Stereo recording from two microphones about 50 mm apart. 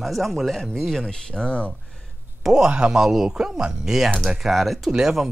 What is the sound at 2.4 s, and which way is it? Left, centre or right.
Speech, centre.